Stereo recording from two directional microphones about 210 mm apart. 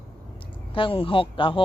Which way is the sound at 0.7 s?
25° left (ahead or behind).